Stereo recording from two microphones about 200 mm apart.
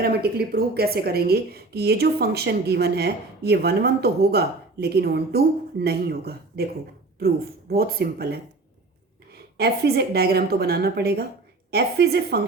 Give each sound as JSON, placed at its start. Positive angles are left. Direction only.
{"t": 0.0, "sound": "speech", "side_deg": -50}
{"t": 7.7, "sound": "speech", "side_deg": -50}
{"t": 9.6, "sound": "speech", "side_deg": -50}